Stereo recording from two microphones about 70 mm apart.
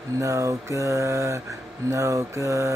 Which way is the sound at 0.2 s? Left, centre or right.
Right.